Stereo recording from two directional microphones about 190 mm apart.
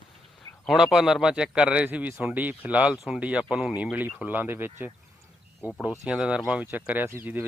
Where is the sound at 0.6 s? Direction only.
Centre (ahead or behind).